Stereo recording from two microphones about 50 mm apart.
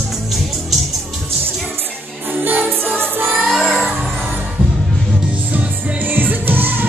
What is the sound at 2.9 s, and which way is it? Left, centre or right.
Music, right.